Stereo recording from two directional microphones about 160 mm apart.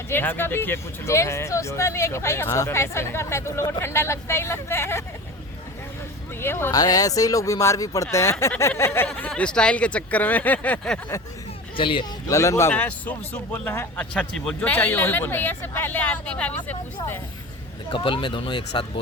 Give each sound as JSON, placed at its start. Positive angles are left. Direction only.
{"t": 0.1, "sound": "speech", "side_deg": 15}
{"t": 6.4, "sound": "speech", "side_deg": 15}
{"t": 11.8, "sound": "speech", "side_deg": 30}
{"t": 12.3, "sound": "speech", "side_deg": 20}
{"t": 17.9, "sound": "speech", "side_deg": 30}